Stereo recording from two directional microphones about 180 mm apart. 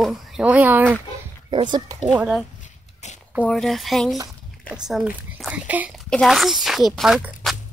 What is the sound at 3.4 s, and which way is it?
Speech, 5° left (ahead or behind).